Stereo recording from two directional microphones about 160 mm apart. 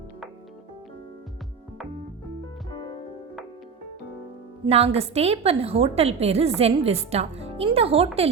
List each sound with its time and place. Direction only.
4.6 s a woman's voice: 40° right (ahead or behind)